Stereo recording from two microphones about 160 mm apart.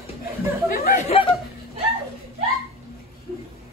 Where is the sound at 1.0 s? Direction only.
40° left (ahead or behind).